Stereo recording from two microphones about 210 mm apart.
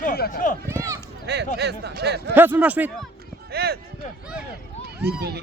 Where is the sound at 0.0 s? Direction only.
45° left (ahead or behind).